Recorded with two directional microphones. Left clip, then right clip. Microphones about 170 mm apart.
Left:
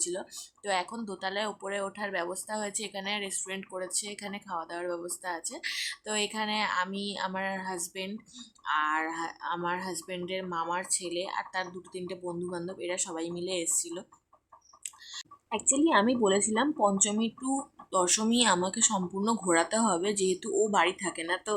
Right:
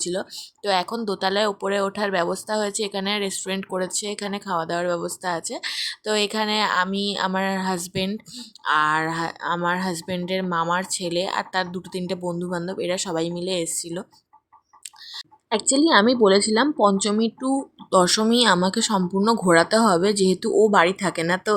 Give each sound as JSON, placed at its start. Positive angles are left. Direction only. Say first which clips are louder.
{"t": 0.0, "sound": "speech", "louder": "right 8 dB", "side_deg": -35}
{"t": 15.4, "sound": "speech", "louder": "right 8 dB", "side_deg": -35}